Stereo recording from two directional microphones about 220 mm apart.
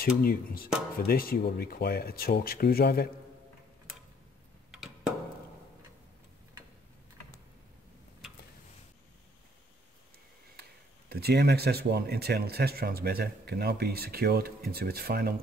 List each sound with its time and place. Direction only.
0.2 s speech: 40° left (ahead or behind)
4.6 s a sound: centre (ahead or behind)
10.5 s speech: 45° right (ahead or behind)